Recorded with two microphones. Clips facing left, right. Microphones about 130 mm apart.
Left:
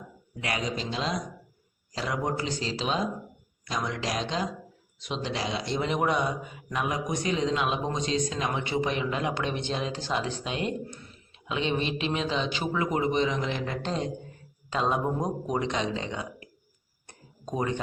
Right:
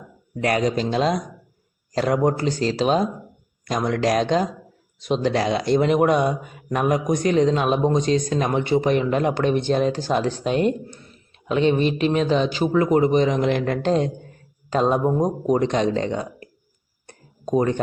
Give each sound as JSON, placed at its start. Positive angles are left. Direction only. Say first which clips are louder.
{"t": 0.3, "sound": "a man's voice", "louder": "right 11 dB", "side_deg": -50}
{"t": 14.7, "sound": "a man's voice", "louder": "right 8 dB", "side_deg": -45}
{"t": 17.5, "sound": "a man's voice", "louder": "right 9 dB", "side_deg": -45}